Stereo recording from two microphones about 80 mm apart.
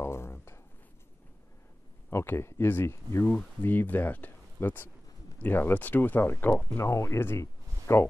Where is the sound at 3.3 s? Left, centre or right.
Left.